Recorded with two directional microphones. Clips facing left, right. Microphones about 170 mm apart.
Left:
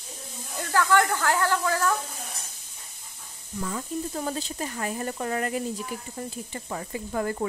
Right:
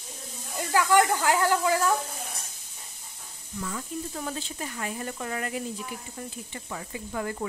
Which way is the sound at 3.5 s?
35° left (ahead or behind).